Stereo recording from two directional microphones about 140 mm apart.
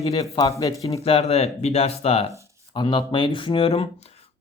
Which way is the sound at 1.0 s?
45° left (ahead or behind).